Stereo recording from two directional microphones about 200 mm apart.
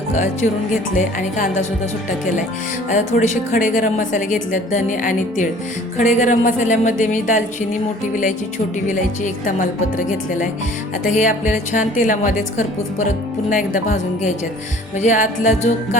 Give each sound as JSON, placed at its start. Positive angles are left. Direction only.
{"t": 2.9, "sound": "a woman's voice", "side_deg": 35}